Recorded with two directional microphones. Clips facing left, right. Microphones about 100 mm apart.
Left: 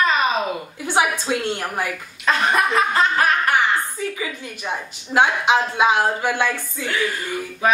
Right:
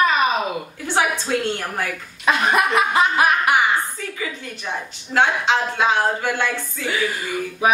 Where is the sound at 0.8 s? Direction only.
15° left (ahead or behind).